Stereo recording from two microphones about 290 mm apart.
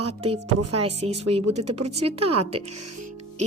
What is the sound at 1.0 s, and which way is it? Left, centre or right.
Speech, right.